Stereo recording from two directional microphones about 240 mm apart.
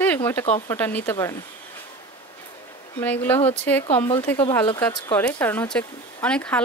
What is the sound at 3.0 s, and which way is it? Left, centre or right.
Speech, centre.